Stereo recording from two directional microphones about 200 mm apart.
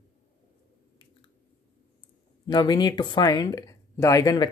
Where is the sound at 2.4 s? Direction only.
20° left (ahead or behind).